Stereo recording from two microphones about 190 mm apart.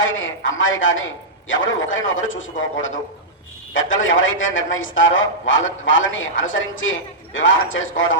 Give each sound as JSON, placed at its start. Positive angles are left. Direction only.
{"t": 0.0, "sound": "a woman's voice", "side_deg": 90}